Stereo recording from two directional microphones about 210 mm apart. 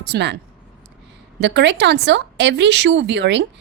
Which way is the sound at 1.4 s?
55° right (ahead or behind).